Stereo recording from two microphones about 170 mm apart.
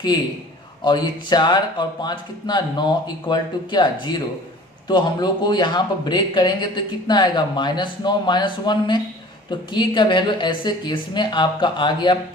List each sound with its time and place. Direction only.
0.9 s speech: 25° left (ahead or behind)